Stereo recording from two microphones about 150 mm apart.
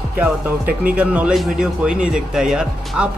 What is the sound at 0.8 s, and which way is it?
Speech, 10° right (ahead or behind).